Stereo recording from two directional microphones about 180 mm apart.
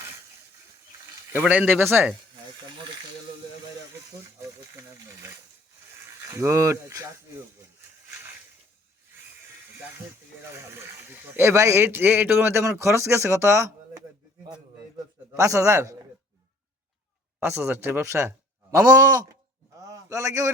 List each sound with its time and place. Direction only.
1.3 s speech: 10° right (ahead or behind)
4.1 s speech: 15° right (ahead or behind)
6.3 s speech: 15° right (ahead or behind)
10.8 s speech: 15° right (ahead or behind)
17.4 s a man's voice: 15° right (ahead or behind)
19.8 s a sound: 20° right (ahead or behind)